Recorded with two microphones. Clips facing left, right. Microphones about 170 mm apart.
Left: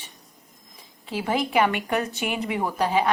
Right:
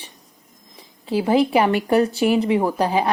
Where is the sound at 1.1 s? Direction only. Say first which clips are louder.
Right 8 dB; 35° right (ahead or behind).